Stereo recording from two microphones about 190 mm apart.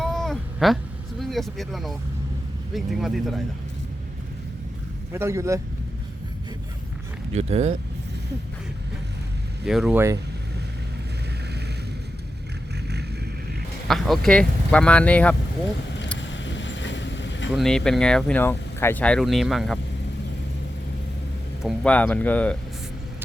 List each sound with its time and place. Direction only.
0.0 s a sound: centre (ahead or behind)
1.2 s speech: centre (ahead or behind)
5.1 s a man's voice: 15° right (ahead or behind)
7.3 s speech: 35° right (ahead or behind)
9.6 s speech: centre (ahead or behind)
13.8 s speech: centre (ahead or behind)
16.1 s vehicle: 70° left (ahead or behind)
17.5 s speech: centre (ahead or behind)
21.6 s speech: 5° left (ahead or behind)